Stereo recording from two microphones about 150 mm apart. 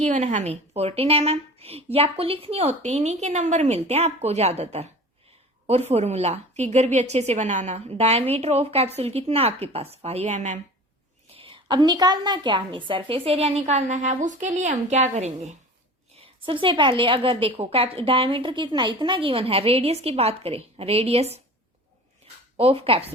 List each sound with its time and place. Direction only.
0.0 s a woman's voice: 50° right (ahead or behind)
5.9 s a woman's voice: 45° right (ahead or behind)
11.3 s a woman's voice: 35° right (ahead or behind)
16.1 s a woman's voice: 35° right (ahead or behind)
22.5 s a woman's voice: 40° right (ahead or behind)